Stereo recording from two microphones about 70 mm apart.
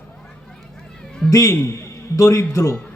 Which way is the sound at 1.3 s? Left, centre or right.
Left.